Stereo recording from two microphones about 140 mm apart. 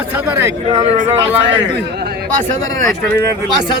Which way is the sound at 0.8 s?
45° right (ahead or behind).